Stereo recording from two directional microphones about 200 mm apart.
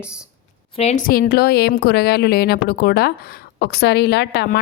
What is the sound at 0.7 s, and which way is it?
A woman's voice, 30° left (ahead or behind).